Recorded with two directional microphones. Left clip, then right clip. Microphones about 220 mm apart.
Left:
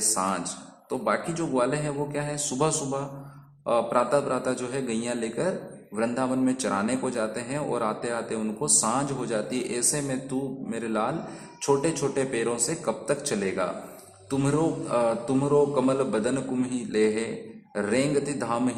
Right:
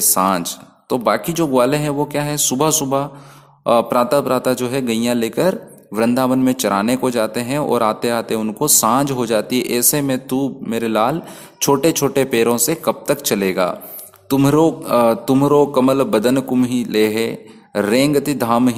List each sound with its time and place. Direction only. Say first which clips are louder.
0.1 s a man's voice: right 15 dB; 40° right (ahead or behind)